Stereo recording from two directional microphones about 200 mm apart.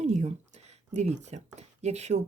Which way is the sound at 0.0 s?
35° right (ahead or behind).